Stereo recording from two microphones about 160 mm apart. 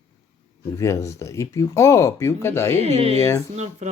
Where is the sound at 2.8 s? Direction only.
40° right (ahead or behind).